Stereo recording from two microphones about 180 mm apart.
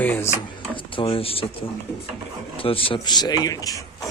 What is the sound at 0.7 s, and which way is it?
Speech, 30° left (ahead or behind).